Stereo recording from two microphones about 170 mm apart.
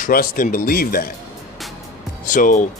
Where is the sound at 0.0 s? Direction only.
55° left (ahead or behind).